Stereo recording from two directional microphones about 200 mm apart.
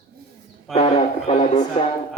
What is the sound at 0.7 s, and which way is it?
Speech, 30° left (ahead or behind).